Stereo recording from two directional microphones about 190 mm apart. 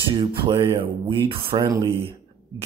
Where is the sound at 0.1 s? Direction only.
25° right (ahead or behind).